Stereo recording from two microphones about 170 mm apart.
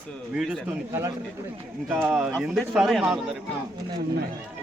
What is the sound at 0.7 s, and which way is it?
A man's voice, 15° right (ahead or behind).